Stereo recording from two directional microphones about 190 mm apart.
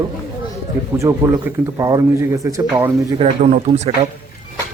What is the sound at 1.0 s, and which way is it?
Speech, 15° right (ahead or behind).